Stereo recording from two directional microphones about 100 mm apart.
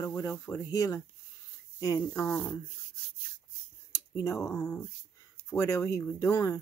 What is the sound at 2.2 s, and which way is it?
Speech, 20° left (ahead or behind).